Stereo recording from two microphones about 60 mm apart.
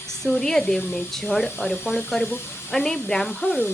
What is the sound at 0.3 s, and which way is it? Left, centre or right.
Speech, centre.